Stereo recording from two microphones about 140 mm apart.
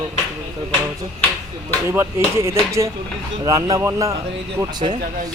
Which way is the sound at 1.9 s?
20° right (ahead or behind).